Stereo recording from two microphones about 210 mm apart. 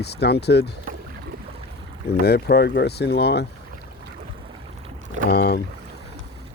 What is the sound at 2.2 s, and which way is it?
Speech, 50° left (ahead or behind).